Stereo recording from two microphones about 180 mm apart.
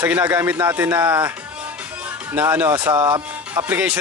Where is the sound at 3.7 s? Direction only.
10° right (ahead or behind).